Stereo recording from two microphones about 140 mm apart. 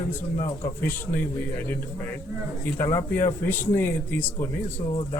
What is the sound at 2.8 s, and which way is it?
Speech, 25° left (ahead or behind).